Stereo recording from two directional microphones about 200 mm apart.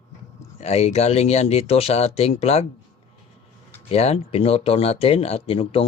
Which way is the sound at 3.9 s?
30° left (ahead or behind).